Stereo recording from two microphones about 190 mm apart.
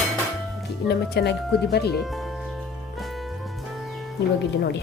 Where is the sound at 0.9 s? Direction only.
60° left (ahead or behind).